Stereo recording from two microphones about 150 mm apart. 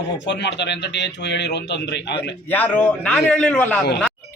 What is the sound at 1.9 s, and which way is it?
Speech, 90° left.